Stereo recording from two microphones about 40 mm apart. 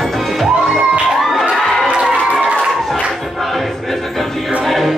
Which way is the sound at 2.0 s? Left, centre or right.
Centre.